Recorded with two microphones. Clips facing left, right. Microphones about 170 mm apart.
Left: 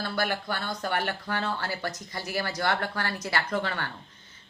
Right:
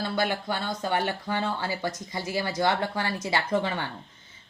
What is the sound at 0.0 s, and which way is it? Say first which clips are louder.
A woman's voice: right 2 dB; 20° right (ahead or behind).